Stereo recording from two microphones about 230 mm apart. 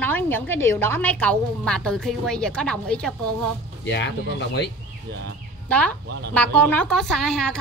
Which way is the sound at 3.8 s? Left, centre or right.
Left.